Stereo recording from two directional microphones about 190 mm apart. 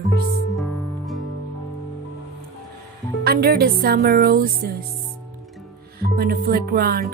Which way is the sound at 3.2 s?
55° right (ahead or behind).